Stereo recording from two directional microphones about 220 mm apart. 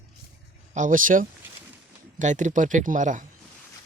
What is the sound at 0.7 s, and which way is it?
Speech, 35° right (ahead or behind).